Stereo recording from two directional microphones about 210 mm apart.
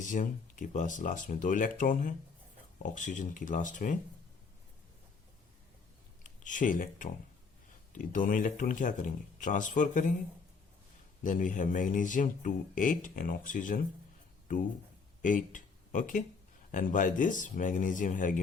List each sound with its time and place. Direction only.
0.0 s speech: 35° left (ahead or behind)
6.4 s speech: 35° left (ahead or behind)
11.2 s speech: 40° left (ahead or behind)
15.2 s speech: 40° left (ahead or behind)